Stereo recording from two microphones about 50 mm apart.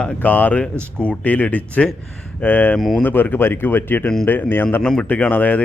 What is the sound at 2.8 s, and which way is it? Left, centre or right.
Speech, centre.